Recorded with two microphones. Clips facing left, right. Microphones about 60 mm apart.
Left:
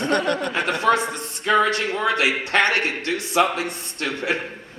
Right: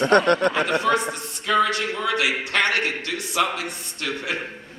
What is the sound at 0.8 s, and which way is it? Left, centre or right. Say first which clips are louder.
A man's voice: left 2 dB; left.